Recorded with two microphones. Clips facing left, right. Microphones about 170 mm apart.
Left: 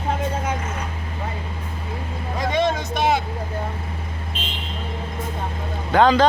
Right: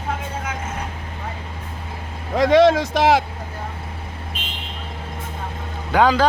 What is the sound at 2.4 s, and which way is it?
Vehicle, 90° right.